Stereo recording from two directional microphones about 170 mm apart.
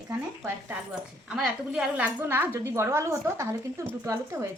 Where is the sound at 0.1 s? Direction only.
10° right (ahead or behind).